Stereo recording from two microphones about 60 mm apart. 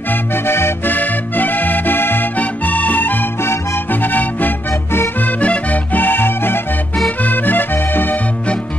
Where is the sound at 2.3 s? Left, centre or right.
Left.